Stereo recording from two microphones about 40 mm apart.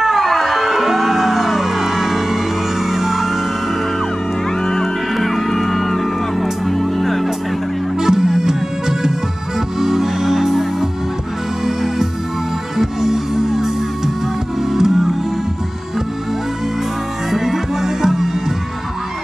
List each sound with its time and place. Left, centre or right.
0.0 s music: centre
4.6 s music: centre
8.0 s music: centre
17.3 s music: centre